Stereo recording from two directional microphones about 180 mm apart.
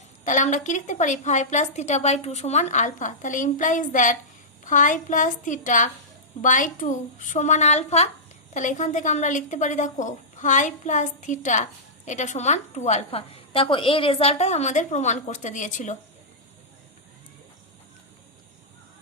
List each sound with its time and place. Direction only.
0.3 s a woman's voice: 45° left (ahead or behind)